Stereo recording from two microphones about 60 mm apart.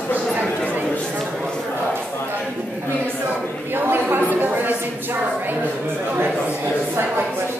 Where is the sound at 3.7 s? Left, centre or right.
Right.